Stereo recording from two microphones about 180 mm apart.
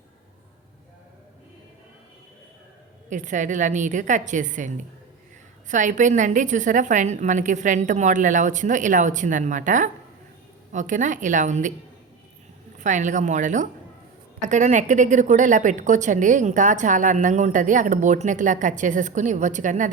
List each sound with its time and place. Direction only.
3.1 s a woman's voice: 45° right (ahead or behind)
12.8 s a woman's voice: 45° right (ahead or behind)